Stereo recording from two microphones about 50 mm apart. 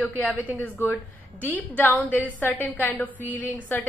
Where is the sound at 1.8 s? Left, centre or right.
Left.